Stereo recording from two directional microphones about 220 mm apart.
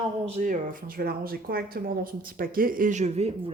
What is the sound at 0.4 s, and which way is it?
Speech, 40° right (ahead or behind).